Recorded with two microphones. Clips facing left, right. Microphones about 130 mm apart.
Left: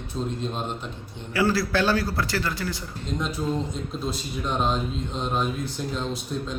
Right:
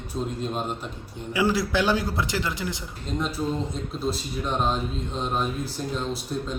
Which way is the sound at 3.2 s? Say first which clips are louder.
Even; 5° right (ahead or behind).